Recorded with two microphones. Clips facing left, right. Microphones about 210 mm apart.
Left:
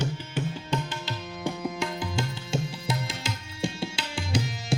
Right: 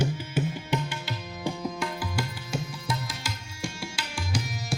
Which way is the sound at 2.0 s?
25° left (ahead or behind).